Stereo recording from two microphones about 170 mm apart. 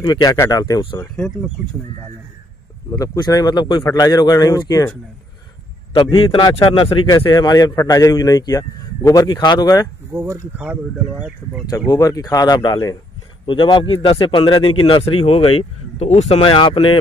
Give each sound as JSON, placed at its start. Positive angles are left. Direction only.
{"t": 0.0, "sound": "a man's voice", "side_deg": 25}
{"t": 1.1, "sound": "speech", "side_deg": 5}
{"t": 2.9, "sound": "a man's voice", "side_deg": 20}
{"t": 5.9, "sound": "a man's voice", "side_deg": 30}
{"t": 10.1, "sound": "speech", "side_deg": -15}
{"t": 11.9, "sound": "a man's voice", "side_deg": 20}